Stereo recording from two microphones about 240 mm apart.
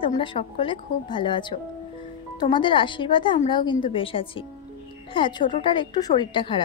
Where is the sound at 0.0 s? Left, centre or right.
Left.